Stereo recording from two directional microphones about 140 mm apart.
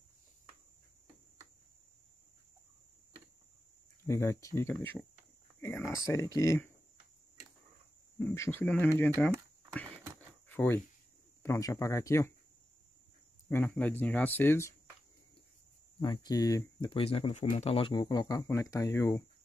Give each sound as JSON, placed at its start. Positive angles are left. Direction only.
{"t": 4.0, "sound": "speech", "side_deg": 20}
{"t": 8.4, "sound": "speech", "side_deg": 15}
{"t": 10.5, "sound": "a sound", "side_deg": 15}
{"t": 11.4, "sound": "speech", "side_deg": 20}
{"t": 13.5, "sound": "speech", "side_deg": 15}
{"t": 16.0, "sound": "speech", "side_deg": 35}
{"t": 16.9, "sound": "speech", "side_deg": 40}
{"t": 17.9, "sound": "speech", "side_deg": 25}